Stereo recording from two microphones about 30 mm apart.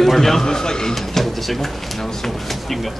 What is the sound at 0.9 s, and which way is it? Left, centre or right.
Speech, centre.